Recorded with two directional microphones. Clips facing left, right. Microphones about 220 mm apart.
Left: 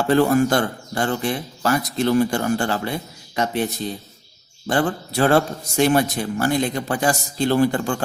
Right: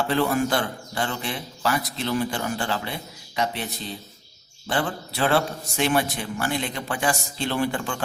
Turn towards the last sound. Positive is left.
turn(degrees=40)  # may be behind; listen again after turning